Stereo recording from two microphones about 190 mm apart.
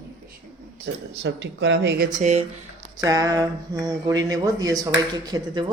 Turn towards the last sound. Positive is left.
turn(degrees=-20)  # may be behind; listen again after turning